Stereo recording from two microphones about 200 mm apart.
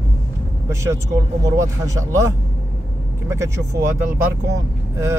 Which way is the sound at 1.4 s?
15° right (ahead or behind).